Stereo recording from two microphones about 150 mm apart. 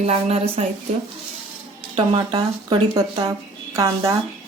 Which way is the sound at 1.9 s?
35° right (ahead or behind).